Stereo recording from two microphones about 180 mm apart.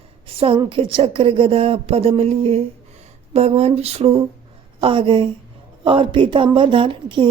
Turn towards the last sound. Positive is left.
turn(degrees=-30)  # may be behind; listen again after turning